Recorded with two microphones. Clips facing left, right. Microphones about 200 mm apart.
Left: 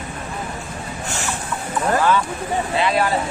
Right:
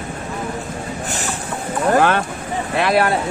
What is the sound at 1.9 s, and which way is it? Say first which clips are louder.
Speech: right 1 dB; 65° right (ahead or behind).